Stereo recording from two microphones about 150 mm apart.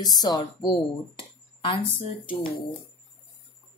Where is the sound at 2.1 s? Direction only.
70° left (ahead or behind).